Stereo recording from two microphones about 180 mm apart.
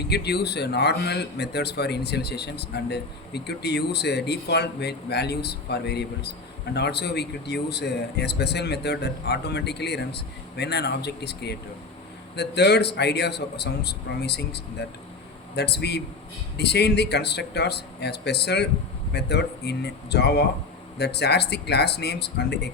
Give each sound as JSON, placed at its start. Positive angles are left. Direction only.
{"t": 0.1, "sound": "a man's voice", "side_deg": 65}